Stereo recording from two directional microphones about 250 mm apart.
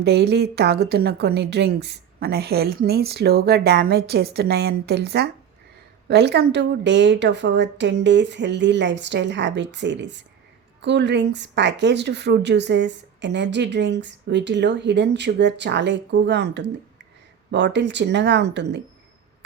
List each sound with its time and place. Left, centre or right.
0.0 s a woman's voice: right